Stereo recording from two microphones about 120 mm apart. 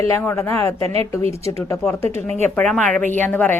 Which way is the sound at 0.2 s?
20° left (ahead or behind).